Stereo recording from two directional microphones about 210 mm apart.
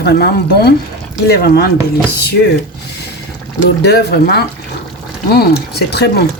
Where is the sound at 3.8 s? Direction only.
50° left (ahead or behind).